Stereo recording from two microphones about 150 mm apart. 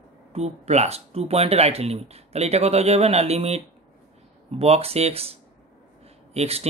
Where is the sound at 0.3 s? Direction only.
45° right (ahead or behind).